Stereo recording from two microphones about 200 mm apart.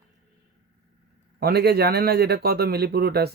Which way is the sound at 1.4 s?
50° right (ahead or behind).